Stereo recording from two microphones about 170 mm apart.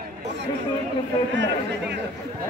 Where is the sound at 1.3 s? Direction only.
90° right.